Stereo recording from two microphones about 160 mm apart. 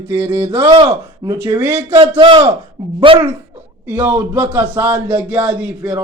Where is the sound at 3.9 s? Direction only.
10° right (ahead or behind).